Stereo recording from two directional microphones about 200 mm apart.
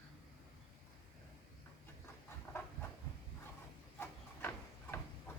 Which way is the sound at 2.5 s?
15° left (ahead or behind).